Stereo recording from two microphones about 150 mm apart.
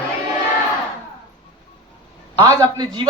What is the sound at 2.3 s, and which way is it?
Speech, 30° right (ahead or behind).